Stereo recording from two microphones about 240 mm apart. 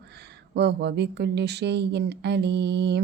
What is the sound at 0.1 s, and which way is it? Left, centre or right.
A woman's voice, right.